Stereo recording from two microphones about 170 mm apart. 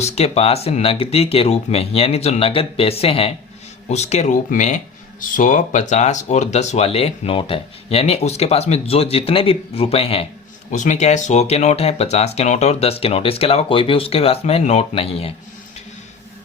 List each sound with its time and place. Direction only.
0.0 s speech: 35° left (ahead or behind)
10.7 s speech: 45° left (ahead or behind)